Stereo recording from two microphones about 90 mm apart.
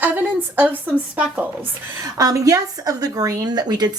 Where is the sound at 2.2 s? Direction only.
45° right (ahead or behind).